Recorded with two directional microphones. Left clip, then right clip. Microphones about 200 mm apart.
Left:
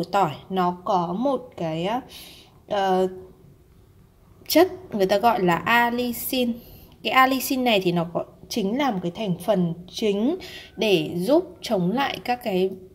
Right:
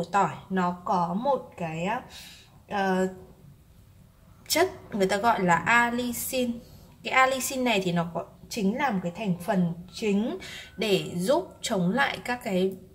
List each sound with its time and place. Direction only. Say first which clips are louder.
0.0 s speech: left 3 dB; 35° left (ahead or behind)
4.5 s a woman's voice: left 6 dB; 30° left (ahead or behind)